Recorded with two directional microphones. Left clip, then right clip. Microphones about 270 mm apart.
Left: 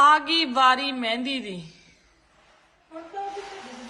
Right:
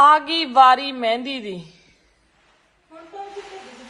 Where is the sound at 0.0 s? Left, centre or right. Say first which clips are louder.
Right 4 dB; centre.